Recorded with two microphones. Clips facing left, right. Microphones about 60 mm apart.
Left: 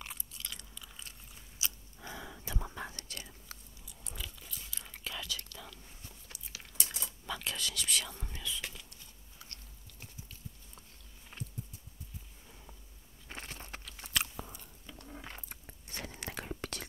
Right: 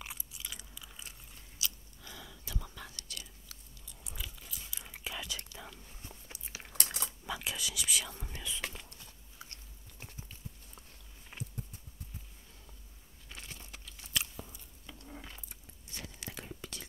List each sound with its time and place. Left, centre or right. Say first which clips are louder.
0.0 s chewing: even; centre
1.6 s whispering: even; left
4.0 s whispering: left 1 dB; centre; by 6.7 s right
6.7 s a sound: right 3 dB; right
7.1 s whispering: even; centre
9.4 s biting: right 3 dB; right
11.3 s a sound: right 1 dB; centre
13.5 s crumpling: left 4 dB; left
13.8 s biting: left 2 dB; left